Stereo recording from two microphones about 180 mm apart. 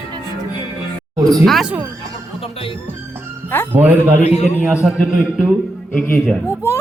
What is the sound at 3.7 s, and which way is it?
Speech, 10° right (ahead or behind).